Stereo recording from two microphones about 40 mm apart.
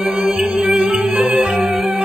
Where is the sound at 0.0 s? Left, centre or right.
Centre.